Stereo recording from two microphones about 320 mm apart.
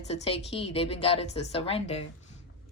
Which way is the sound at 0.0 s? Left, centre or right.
Centre.